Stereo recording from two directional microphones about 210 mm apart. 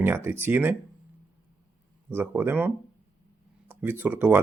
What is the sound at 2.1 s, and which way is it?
Speech, 10° right (ahead or behind).